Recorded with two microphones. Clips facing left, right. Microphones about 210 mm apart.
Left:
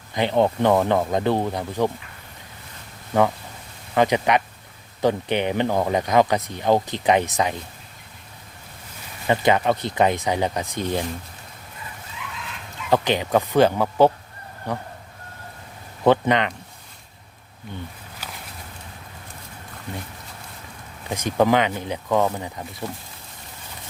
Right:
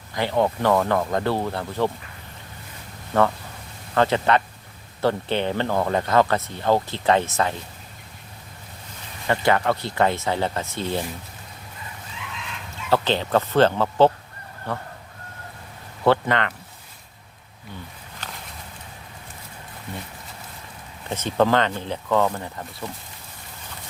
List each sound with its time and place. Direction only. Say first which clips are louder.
0.1 s speech: left 2 dB; 20° left (ahead or behind)
3.1 s speech: left 1 dB; 15° left (ahead or behind)
9.2 s speech: left 2 dB; 20° left (ahead or behind)
12.9 s speech: left 1 dB; 15° left (ahead or behind)
16.0 s speech: left 2 dB; 20° left (ahead or behind)
21.1 s speech: left 1 dB; 10° left (ahead or behind)